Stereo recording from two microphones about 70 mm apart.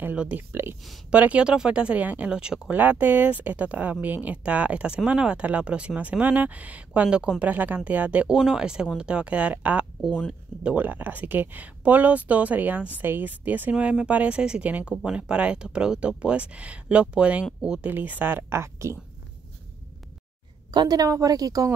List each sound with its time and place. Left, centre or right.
0.0 s speech: right
1.1 s speech: centre
2.7 s speech: right
8.4 s speech: centre; by 18.9 s right
20.7 s speech: right